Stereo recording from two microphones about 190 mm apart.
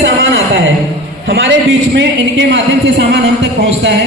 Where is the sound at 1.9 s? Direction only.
70° right (ahead or behind).